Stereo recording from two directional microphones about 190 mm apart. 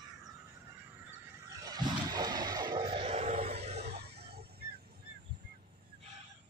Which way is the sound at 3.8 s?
60° right (ahead or behind).